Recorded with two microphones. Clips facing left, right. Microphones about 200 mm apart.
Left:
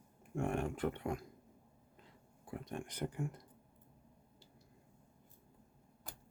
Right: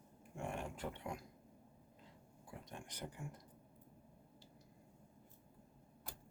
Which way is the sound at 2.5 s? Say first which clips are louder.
Left 9 dB; 60° left (ahead or behind).